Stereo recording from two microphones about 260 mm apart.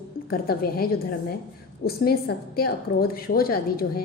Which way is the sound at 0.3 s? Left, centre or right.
Left.